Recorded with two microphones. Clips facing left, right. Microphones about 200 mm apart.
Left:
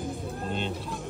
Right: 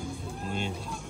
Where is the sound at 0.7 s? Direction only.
Centre (ahead or behind).